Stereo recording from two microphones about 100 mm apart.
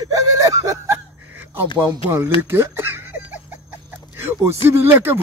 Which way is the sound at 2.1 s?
20° right (ahead or behind).